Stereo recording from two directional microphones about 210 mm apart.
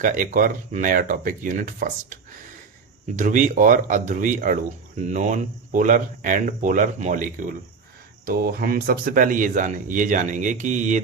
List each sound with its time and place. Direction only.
0.0 s speech: 40° right (ahead or behind)
3.2 s speech: 40° right (ahead or behind)